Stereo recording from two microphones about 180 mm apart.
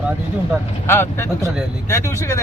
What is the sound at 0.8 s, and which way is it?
Speech, 10° left (ahead or behind).